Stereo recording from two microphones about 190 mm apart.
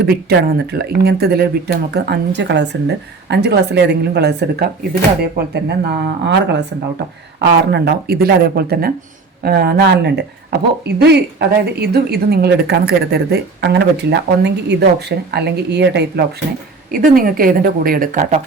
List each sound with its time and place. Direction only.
0.1 s speech: 55° right (ahead or behind)
16.9 s speech: 50° right (ahead or behind)